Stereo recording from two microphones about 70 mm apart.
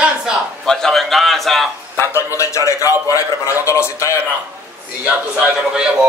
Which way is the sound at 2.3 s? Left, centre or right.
Left.